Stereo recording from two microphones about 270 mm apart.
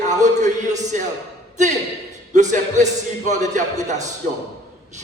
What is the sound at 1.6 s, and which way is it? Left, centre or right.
A man's voice, right.